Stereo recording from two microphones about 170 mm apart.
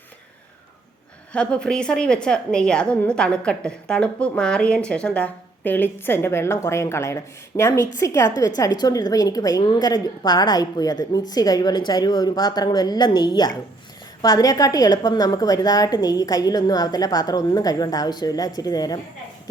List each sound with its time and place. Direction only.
1.3 s a woman's voice: 5° left (ahead or behind); by 18.9 s 20° left (ahead or behind)